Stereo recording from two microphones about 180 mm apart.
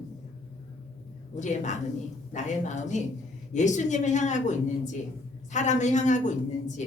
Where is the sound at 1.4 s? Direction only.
40° left (ahead or behind).